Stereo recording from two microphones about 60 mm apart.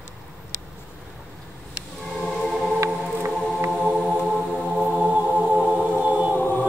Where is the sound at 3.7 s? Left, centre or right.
Centre.